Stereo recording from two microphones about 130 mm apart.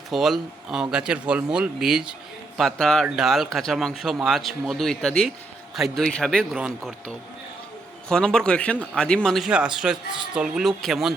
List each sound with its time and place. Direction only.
0.1 s speech: centre (ahead or behind)
8.1 s speech: 5° left (ahead or behind)